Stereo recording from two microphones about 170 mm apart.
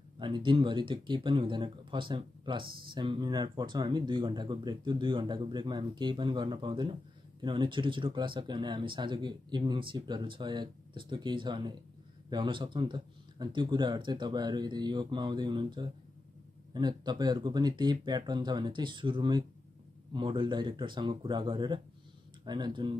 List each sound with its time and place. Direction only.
0.2 s speech: 30° right (ahead or behind)